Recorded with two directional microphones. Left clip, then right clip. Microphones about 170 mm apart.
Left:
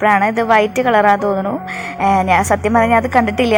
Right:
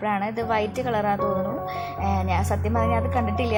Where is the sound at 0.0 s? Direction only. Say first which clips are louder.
Left 13 dB; 25° left (ahead or behind).